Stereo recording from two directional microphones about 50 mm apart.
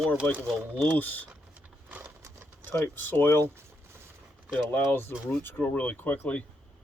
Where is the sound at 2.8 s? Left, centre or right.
Left.